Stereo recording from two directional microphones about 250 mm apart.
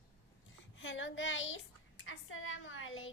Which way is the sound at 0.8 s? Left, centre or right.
Left.